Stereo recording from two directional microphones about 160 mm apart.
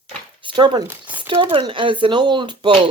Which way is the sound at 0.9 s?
10° right (ahead or behind).